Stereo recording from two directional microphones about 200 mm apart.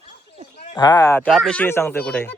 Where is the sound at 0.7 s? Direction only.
20° left (ahead or behind).